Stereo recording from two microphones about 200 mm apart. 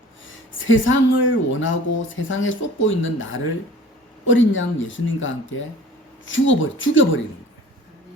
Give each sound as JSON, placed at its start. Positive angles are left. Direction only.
{"t": 0.3, "sound": "speech", "side_deg": 75}